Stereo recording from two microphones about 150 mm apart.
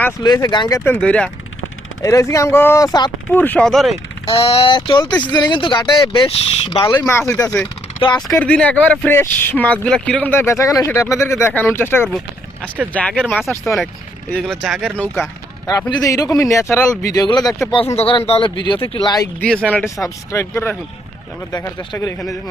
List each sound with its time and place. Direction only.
0.2 s speech: 25° left (ahead or behind)
0.9 s speech: 5° left (ahead or behind)
2.0 s speech: 20° left (ahead or behind)
3.2 s speech: 10° left (ahead or behind)
4.3 s speech: 40° left (ahead or behind); by 7.3 s 20° left (ahead or behind)
7.3 s speech: 5° left (ahead or behind)
8.0 s speech: 30° left (ahead or behind)
8.4 s speech: 10° left (ahead or behind)
15.6 s speech: 25° left (ahead or behind)
17.9 s speech: 40° left (ahead or behind)
19.6 s speech: 10° left (ahead or behind)
20.0 s speech: 20° left (ahead or behind)
21.9 s speech: 15° left (ahead or behind)